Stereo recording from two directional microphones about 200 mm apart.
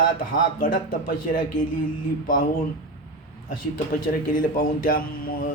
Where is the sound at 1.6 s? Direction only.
45° left (ahead or behind).